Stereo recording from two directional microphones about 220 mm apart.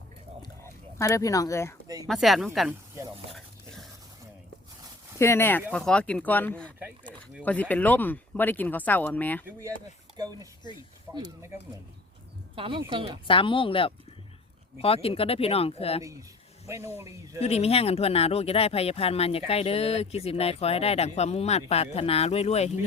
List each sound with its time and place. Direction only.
0.4 s a sound: 15° left (ahead or behind)
2.0 s speech: centre (ahead or behind)
3.3 s a sound: centre (ahead or behind)
5.2 s speech: 10° left (ahead or behind)
9.5 s speech: 10° right (ahead or behind)
13.2 s speech: 25° left (ahead or behind)
16.6 s speech: 15° right (ahead or behind)
17.4 s speech: 25° left (ahead or behind)